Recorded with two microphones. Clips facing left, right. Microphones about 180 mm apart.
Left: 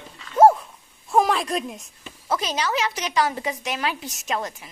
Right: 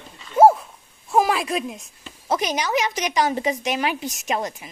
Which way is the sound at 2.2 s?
15° right (ahead or behind).